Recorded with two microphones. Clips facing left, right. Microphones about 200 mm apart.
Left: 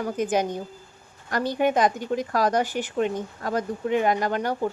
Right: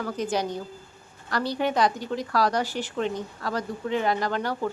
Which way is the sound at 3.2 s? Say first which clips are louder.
Left 3 dB; 45° left (ahead or behind).